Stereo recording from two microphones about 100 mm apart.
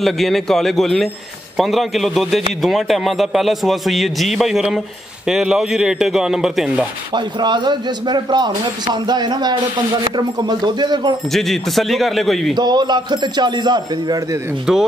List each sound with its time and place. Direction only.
0.0 s a man's voice: centre (ahead or behind)
7.2 s a man's voice: 50° right (ahead or behind)
11.3 s a man's voice: 5° left (ahead or behind)
12.5 s a man's voice: 45° right (ahead or behind)
14.7 s speech: 5° right (ahead or behind)